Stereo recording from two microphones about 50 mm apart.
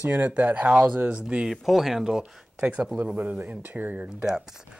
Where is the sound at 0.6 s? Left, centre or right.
Centre.